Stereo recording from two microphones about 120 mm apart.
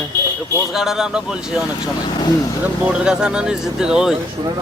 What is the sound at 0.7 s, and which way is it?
Speech, 5° right (ahead or behind).